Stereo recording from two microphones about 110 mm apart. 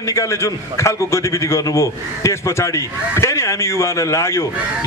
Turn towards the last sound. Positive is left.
turn(degrees=25)  # may be behind; listen again after turning